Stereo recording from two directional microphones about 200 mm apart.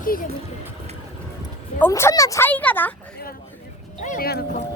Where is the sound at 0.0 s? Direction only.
45° left (ahead or behind).